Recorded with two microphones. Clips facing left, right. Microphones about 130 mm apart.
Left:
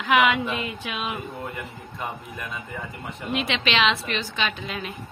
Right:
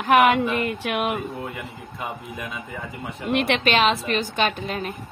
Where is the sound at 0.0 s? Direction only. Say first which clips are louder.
Right 4 dB; 50° right (ahead or behind).